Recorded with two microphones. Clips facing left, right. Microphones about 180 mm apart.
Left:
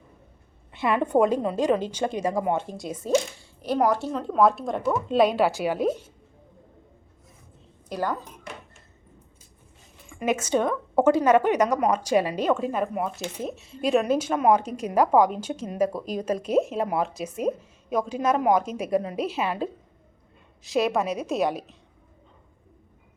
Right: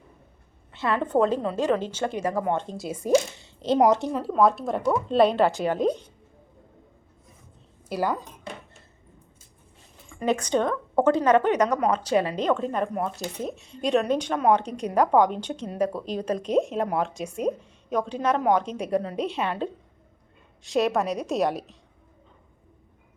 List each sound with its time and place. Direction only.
0.7 s a woman's voice: 15° left (ahead or behind)
2.7 s speech: centre (ahead or behind)
3.0 s speech: 20° right (ahead or behind)
4.1 s speech: 5° right (ahead or behind)
7.9 s speech: 10° right (ahead or behind)
10.1 s a sound: 15° left (ahead or behind)
10.3 s a woman's voice: 10° left (ahead or behind)